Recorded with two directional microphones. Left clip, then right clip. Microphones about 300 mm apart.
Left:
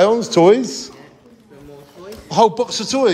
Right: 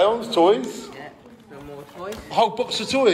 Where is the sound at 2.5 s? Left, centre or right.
Centre.